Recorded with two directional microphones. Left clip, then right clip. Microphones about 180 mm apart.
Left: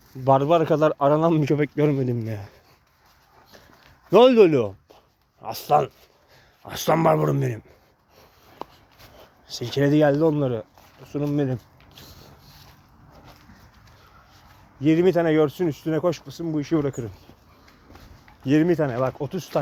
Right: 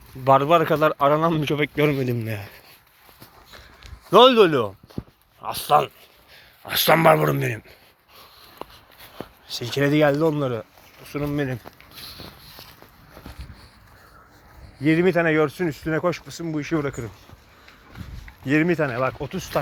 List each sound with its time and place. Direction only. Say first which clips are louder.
0.3 s speech: right 2 dB; 20° left (ahead or behind)
4.1 s speech: right 1 dB; 30° left (ahead or behind)
6.7 s speech: right 4 dB; 20° left (ahead or behind)
9.5 s speech: even; 10° left (ahead or behind); by 11.6 s 30° left (ahead or behind)
14.8 s speech: even; 5° right (ahead or behind)
15.0 s speech: even; 10° left (ahead or behind)
18.4 s speech: even; 15° left (ahead or behind)
19.2 s speech: left 1 dB; 25° left (ahead or behind)